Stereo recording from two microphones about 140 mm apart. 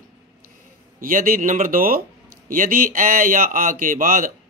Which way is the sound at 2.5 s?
75° right (ahead or behind).